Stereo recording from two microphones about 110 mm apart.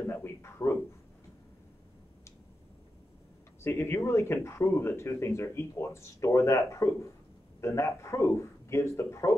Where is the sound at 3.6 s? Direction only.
20° left (ahead or behind).